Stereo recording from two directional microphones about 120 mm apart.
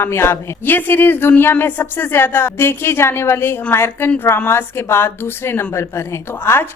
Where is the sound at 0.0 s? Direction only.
20° left (ahead or behind).